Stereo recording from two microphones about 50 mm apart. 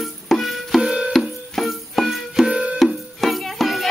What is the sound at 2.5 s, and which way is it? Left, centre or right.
Music, right.